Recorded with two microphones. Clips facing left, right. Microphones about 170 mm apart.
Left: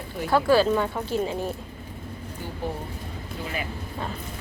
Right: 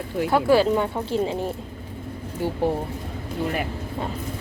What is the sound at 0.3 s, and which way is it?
Speech, 20° right (ahead or behind).